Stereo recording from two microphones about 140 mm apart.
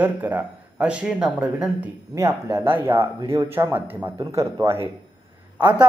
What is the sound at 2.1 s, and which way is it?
A man's voice, 20° right (ahead or behind).